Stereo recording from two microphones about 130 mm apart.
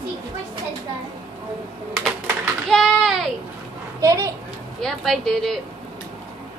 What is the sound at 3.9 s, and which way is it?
Speech, 25° right (ahead or behind).